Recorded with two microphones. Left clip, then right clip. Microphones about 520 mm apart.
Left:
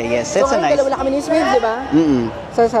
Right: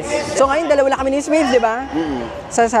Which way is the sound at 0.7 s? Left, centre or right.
Right.